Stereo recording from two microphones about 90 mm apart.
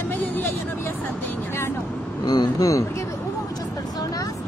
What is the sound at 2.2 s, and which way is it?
Speech, 50° left (ahead or behind).